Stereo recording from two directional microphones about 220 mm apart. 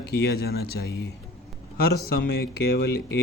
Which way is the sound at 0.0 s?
50° left (ahead or behind).